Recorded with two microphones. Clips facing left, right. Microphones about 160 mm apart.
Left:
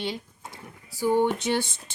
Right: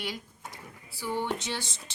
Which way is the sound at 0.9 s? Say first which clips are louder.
Left 9 dB; 45° left (ahead or behind).